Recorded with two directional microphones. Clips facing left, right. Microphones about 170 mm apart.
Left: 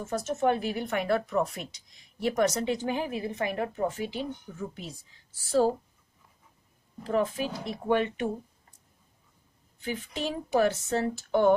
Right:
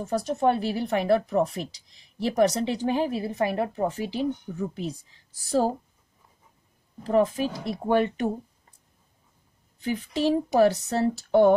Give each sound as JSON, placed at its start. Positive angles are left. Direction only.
{"t": 0.1, "sound": "speech", "side_deg": -35}
{"t": 7.0, "sound": "speech", "side_deg": -35}
{"t": 9.8, "sound": "speech", "side_deg": -35}